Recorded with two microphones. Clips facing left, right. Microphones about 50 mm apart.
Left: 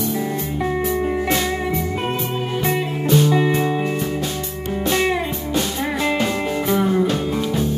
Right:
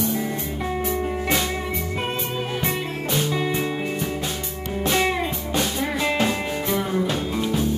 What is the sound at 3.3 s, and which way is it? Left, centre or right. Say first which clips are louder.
Music: left 6 dB; centre.